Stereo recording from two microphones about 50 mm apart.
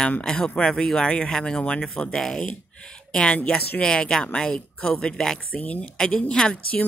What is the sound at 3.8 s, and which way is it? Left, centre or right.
Speech, centre.